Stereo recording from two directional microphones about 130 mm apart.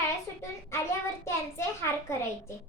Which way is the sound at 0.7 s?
20° left (ahead or behind).